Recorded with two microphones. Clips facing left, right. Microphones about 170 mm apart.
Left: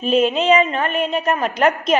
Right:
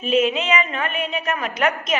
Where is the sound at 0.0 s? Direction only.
35° left (ahead or behind).